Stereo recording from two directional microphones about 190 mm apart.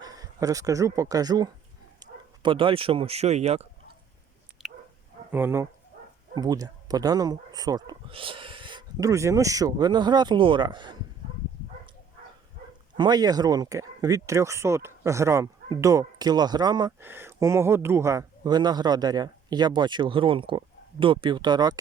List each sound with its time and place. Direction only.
0.0 s speech: 20° right (ahead or behind); by 3.7 s 35° right (ahead or behind)
4.6 s dog: centre (ahead or behind)
5.3 s speech: 10° right (ahead or behind)
13.0 s speech: 20° right (ahead or behind)